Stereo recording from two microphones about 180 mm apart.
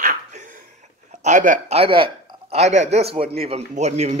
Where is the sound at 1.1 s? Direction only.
40° right (ahead or behind).